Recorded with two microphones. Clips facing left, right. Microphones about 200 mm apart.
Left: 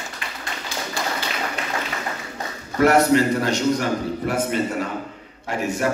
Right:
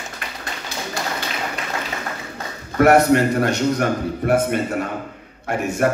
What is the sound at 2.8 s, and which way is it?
A man's voice, 55° right (ahead or behind).